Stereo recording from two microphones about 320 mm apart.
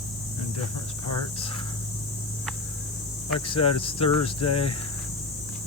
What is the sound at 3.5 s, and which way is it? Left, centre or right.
Speech, centre.